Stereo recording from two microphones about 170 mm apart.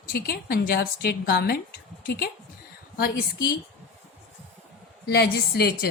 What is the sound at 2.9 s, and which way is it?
Speech, 65° left (ahead or behind).